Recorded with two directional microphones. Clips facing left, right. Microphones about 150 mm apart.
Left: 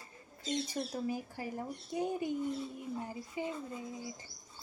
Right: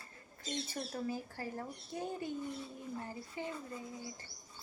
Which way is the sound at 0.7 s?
15° left (ahead or behind).